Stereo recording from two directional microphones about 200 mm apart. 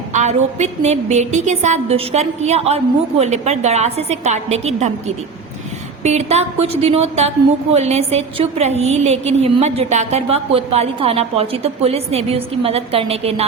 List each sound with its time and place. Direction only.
0.1 s a woman's voice: 35° right (ahead or behind)